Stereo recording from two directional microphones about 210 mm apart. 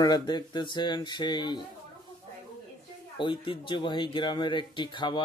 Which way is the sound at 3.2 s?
25° left (ahead or behind).